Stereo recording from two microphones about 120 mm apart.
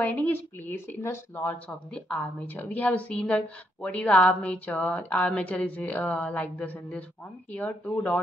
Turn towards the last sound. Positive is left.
turn(degrees=10)  # may be behind; listen again after turning